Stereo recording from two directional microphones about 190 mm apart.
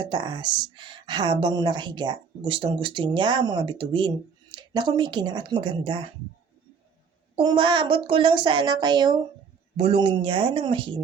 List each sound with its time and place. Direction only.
0.1 s speech: 25° right (ahead or behind)
7.3 s speech: 25° right (ahead or behind)